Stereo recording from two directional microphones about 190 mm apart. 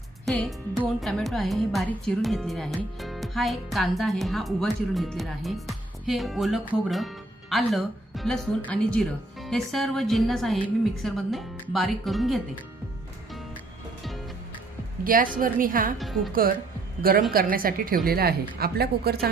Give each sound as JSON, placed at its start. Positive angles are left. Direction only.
{"t": 0.3, "sound": "speech", "side_deg": 0}
{"t": 15.0, "sound": "a woman's voice", "side_deg": -45}
{"t": 16.0, "sound": "speech", "side_deg": 0}
{"t": 17.0, "sound": "a woman's voice", "side_deg": -50}